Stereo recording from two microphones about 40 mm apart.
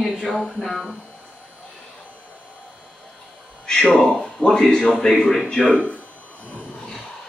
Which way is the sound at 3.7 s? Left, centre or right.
Centre.